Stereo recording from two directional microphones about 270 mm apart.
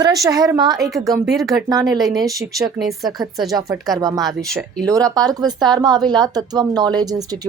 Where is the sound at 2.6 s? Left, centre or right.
Centre.